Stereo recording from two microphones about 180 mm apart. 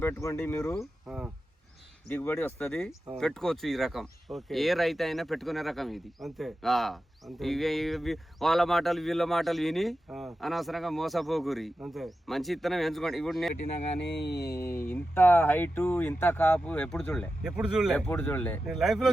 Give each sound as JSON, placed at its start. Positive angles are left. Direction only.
{"t": 0.0, "sound": "speech", "side_deg": 15}
{"t": 1.0, "sound": "speech", "side_deg": -5}
{"t": 2.0, "sound": "speech", "side_deg": 10}
{"t": 14.2, "sound": "a sound", "side_deg": 65}
{"t": 14.5, "sound": "speech", "side_deg": 15}
{"t": 17.9, "sound": "speech", "side_deg": 5}
{"t": 18.6, "sound": "speech", "side_deg": 0}